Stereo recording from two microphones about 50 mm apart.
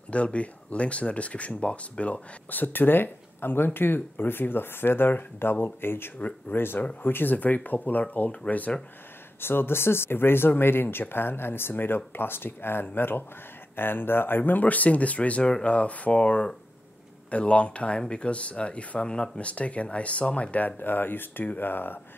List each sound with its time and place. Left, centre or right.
0.1 s speech: left
9.4 s speech: left
20.5 s speech: left